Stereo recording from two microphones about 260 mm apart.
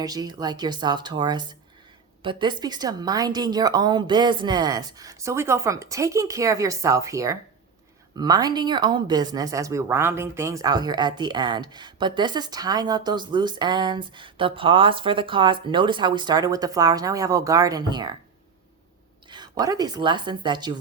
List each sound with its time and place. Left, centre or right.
0.0 s speech: centre
19.3 s speech: centre